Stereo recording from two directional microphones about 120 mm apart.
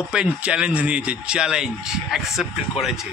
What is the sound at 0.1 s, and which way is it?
Speech, 10° right (ahead or behind).